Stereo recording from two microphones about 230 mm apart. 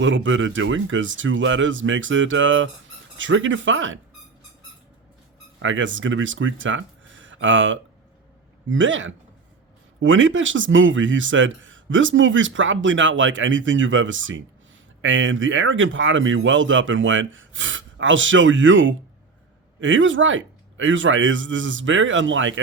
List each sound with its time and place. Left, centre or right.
0.0 s a man's voice: right
5.5 s a man's voice: right